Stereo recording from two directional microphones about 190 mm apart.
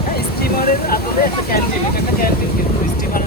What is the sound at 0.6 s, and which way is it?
Speech, 50° left (ahead or behind).